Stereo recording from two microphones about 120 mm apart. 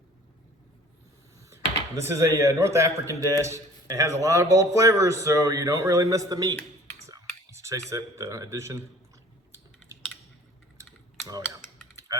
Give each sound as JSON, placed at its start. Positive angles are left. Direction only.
{"t": 2.0, "sound": "a man's voice", "side_deg": -25}